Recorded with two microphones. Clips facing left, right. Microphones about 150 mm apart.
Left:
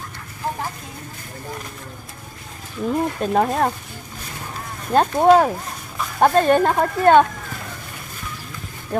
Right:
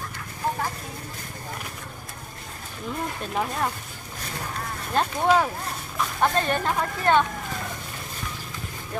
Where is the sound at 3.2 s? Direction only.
45° left (ahead or behind).